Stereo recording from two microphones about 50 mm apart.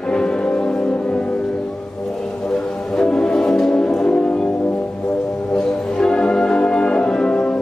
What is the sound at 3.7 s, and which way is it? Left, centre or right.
Brass instrument, centre.